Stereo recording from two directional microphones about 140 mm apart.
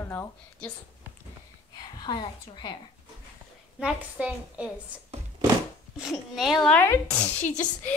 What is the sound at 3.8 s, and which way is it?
Speech, 5° right (ahead or behind).